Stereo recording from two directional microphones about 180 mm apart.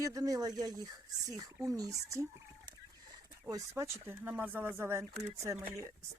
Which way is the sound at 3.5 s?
15° right (ahead or behind).